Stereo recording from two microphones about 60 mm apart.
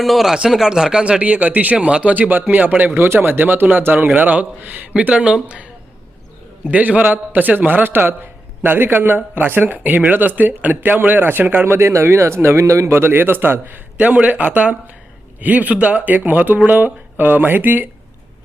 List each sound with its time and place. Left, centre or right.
0.0 s speech: centre
1.0 s a man's voice: right
6.7 s a man's voice: right